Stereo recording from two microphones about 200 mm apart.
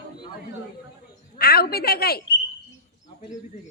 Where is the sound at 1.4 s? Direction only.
50° left (ahead or behind).